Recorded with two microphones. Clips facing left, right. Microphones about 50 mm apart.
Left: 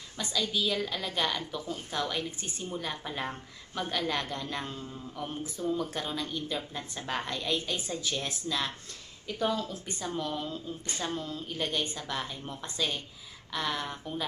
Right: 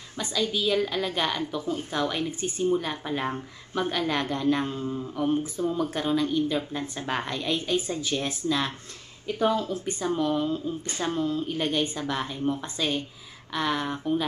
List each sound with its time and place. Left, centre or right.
0.2 s a woman's voice: centre